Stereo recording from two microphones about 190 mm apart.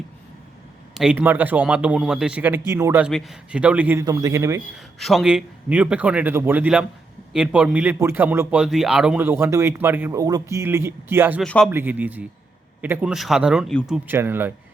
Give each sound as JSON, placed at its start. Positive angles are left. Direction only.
{"t": 0.9, "sound": "a man's voice", "side_deg": -5}
{"t": 3.1, "sound": "a man's voice", "side_deg": 0}
{"t": 4.9, "sound": "a man's voice", "side_deg": 0}
{"t": 11.4, "sound": "a man's voice", "side_deg": 5}
{"t": 11.7, "sound": "a man's voice", "side_deg": -10}